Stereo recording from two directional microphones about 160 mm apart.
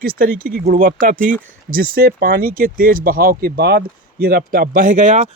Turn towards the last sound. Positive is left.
turn(degrees=-50)  # may be behind; listen again after turning